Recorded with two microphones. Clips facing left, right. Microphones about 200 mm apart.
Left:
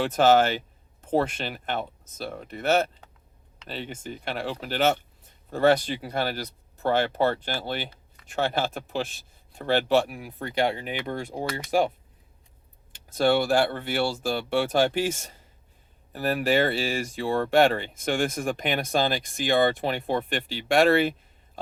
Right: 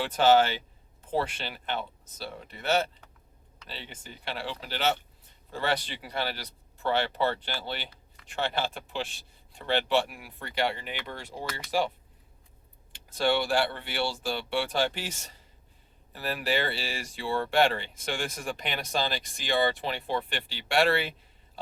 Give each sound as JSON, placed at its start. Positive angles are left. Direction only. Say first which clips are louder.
{"t": 0.0, "sound": "speech", "louder": "left 2 dB", "side_deg": 45}
{"t": 12.9, "sound": "speech", "louder": "left 5 dB", "side_deg": 45}
{"t": 16.1, "sound": "speech", "louder": "left 7 dB", "side_deg": 45}